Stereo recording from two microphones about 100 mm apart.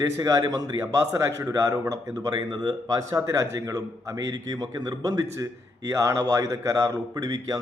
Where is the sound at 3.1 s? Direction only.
35° right (ahead or behind).